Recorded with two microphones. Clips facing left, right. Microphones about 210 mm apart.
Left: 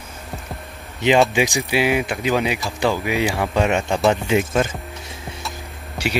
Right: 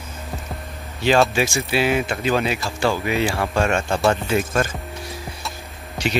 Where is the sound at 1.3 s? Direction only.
15° left (ahead or behind).